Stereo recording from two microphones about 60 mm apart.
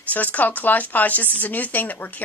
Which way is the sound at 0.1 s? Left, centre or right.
Left.